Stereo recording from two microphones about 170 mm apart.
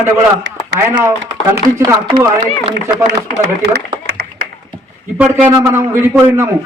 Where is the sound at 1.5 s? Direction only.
20° right (ahead or behind).